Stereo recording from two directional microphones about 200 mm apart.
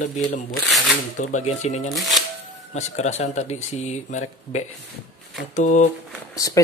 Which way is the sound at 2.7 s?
35° left (ahead or behind).